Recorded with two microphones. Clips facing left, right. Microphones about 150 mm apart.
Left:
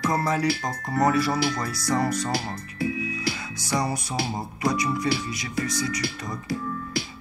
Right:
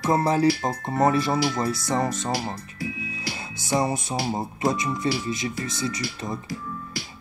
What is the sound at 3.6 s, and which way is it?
Speech, 25° right (ahead or behind).